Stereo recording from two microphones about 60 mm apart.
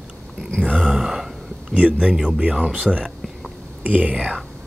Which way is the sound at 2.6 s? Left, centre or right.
Right.